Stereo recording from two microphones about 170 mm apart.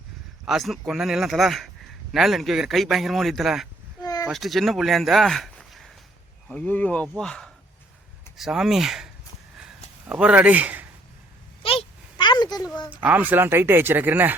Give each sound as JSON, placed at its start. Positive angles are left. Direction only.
{"t": 0.4, "sound": "a man's voice", "side_deg": 0}
{"t": 4.0, "sound": "a sound", "side_deg": 20}
{"t": 4.3, "sound": "a man's voice", "side_deg": 0}
{"t": 10.1, "sound": "speech", "side_deg": -5}
{"t": 11.6, "sound": "a sound", "side_deg": 35}
{"t": 12.9, "sound": "speech", "side_deg": -10}